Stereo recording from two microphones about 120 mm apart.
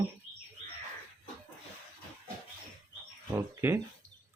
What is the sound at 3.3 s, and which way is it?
Speech, 20° right (ahead or behind).